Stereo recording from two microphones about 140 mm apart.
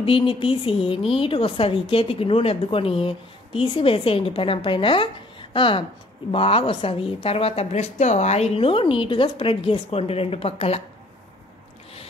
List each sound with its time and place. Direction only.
0.0 s a woman's voice: 40° left (ahead or behind)